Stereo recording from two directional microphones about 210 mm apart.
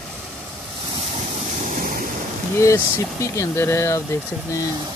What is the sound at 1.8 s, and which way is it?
Waves, 40° right (ahead or behind).